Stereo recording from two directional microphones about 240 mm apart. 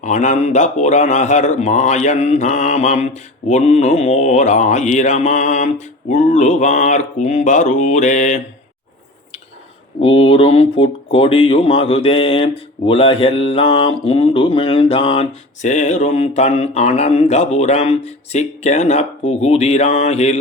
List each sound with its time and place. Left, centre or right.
0.0 s speech: left
10.0 s speech: left